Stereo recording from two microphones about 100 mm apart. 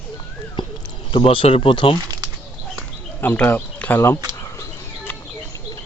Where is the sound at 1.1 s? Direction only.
60° left (ahead or behind).